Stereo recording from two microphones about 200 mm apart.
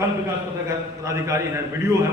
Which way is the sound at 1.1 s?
15° right (ahead or behind).